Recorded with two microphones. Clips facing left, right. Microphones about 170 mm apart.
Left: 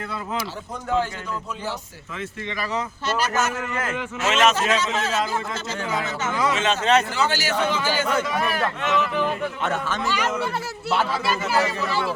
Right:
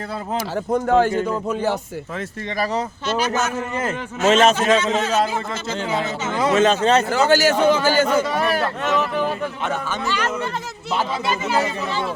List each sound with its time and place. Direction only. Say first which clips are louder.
0.3 s a man's voice: right 9 dB; 50° right (ahead or behind)
3.8 s a man's voice: right 3 dB; 35° right (ahead or behind)
9.6 s a man's voice: even; centre (ahead or behind)
10.1 s speech: right 1 dB; 10° left (ahead or behind)
11.5 s speech: left 1 dB; 20° right (ahead or behind)